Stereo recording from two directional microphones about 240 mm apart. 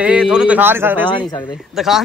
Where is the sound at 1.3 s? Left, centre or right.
Centre.